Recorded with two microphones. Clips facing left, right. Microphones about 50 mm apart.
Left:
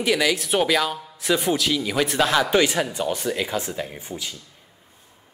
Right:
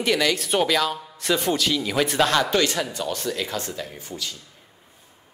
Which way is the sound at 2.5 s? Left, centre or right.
Centre.